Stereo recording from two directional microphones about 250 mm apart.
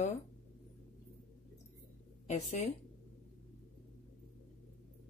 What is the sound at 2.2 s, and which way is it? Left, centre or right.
Speech, left.